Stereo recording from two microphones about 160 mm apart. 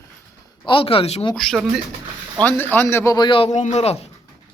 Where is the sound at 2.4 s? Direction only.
10° left (ahead or behind); by 3.9 s 45° left (ahead or behind).